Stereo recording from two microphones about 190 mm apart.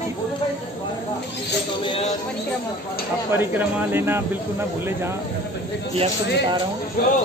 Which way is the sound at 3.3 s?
10° right (ahead or behind).